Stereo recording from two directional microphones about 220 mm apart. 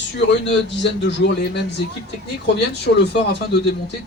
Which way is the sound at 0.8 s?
50° left (ahead or behind).